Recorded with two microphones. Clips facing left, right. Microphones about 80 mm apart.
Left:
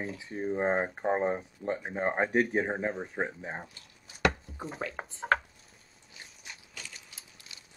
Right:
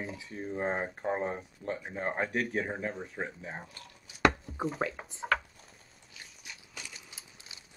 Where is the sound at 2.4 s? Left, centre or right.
Left.